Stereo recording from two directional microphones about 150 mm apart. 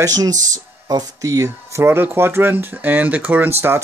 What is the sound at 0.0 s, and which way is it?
Speech, 25° right (ahead or behind).